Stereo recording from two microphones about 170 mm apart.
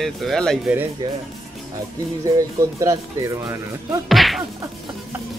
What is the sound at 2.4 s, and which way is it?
Speech, 20° right (ahead or behind).